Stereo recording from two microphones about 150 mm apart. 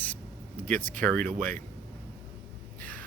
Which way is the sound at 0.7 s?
65° right (ahead or behind).